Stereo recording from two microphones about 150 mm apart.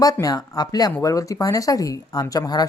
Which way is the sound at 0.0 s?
25° left (ahead or behind).